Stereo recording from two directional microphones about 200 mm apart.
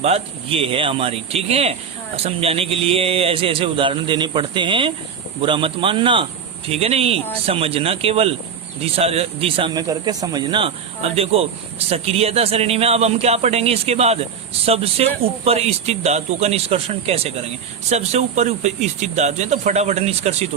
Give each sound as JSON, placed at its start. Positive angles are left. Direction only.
{"t": 0.0, "sound": "speech", "side_deg": -30}